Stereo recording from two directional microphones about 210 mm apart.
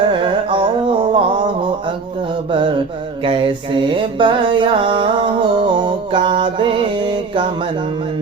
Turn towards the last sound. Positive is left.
turn(degrees=-25)  # may be behind; listen again after turning